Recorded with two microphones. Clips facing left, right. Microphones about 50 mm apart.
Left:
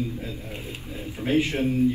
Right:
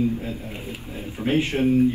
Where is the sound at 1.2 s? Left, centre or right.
Right.